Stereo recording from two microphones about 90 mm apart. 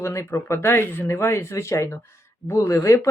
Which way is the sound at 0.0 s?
30° left (ahead or behind).